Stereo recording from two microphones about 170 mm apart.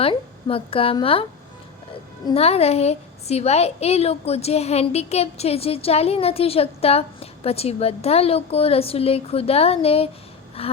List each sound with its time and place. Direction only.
0.0 s a woman's voice: 30° left (ahead or behind)
2.2 s a woman's voice: 35° left (ahead or behind)